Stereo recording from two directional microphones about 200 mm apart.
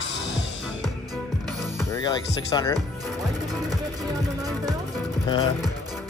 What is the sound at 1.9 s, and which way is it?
Speech, 20° left (ahead or behind).